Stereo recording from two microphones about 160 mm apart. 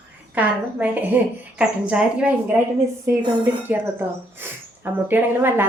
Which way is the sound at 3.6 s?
10° right (ahead or behind).